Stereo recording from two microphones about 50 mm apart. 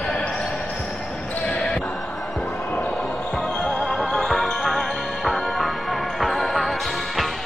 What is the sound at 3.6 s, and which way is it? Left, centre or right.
Music, centre.